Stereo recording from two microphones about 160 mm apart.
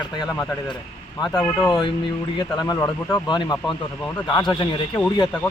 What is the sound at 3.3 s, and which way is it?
Speech, 30° left (ahead or behind).